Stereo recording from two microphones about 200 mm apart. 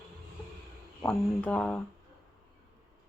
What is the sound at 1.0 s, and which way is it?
Speech, 5° left (ahead or behind).